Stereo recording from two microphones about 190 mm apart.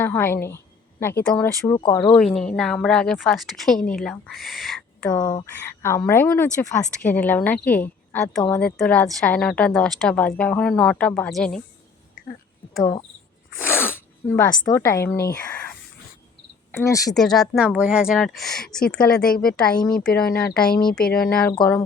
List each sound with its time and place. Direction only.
0.0 s a sound: 10° left (ahead or behind)
1.2 s a woman's voice: 5° left (ahead or behind)
1.6 s speech: 20° left (ahead or behind)
2.0 s a woman's voice: 5° left (ahead or behind)
5.1 s a woman's voice: 20° left (ahead or behind); by 11.6 s centre (ahead or behind)
12.2 s a sound: 50° left (ahead or behind)
12.8 s speech: 20° left (ahead or behind)
13.7 s speech: 10° left (ahead or behind)
16.7 s speech: 15° left (ahead or behind)
17.2 s a woman's voice: centre (ahead or behind)
19.2 s speech: 50° left (ahead or behind)
19.8 s a woman's voice: 5° left (ahead or behind)
21.5 s speech: 20° left (ahead or behind)